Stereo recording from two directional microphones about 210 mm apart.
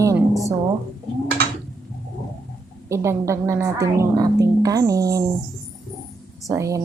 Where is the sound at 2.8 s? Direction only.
15° right (ahead or behind).